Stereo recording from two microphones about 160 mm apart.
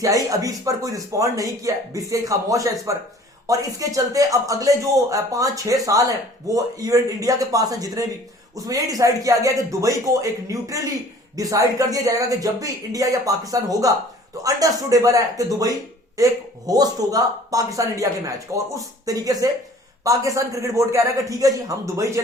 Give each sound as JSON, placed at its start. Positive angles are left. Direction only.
{"t": 0.0, "sound": "speech", "side_deg": -20}